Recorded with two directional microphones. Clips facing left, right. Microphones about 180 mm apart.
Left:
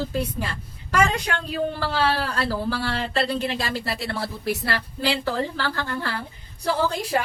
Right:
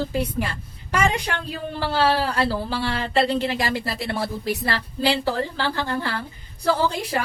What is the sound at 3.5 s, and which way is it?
A woman's voice, 20° right (ahead or behind).